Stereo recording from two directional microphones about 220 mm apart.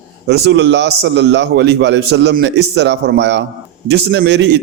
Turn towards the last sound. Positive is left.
turn(degrees=-50)  # may be behind; listen again after turning